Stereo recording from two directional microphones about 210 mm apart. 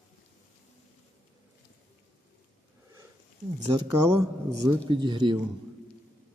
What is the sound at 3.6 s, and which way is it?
Speech, 15° right (ahead or behind).